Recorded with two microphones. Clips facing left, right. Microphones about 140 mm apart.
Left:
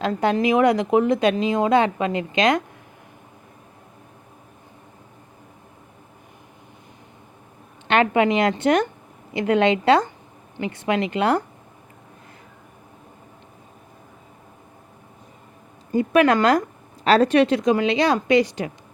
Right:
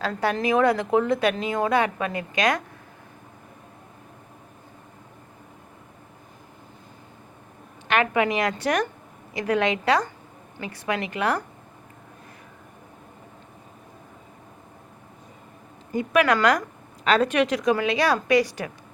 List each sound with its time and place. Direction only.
0.0 s a woman's voice: 20° left (ahead or behind)
7.9 s a woman's voice: 25° left (ahead or behind)
15.9 s a woman's voice: 30° left (ahead or behind)